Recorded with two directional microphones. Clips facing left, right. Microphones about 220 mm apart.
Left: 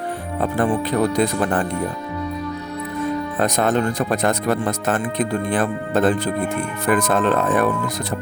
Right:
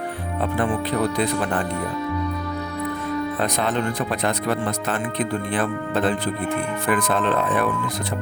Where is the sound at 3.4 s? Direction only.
45° left (ahead or behind).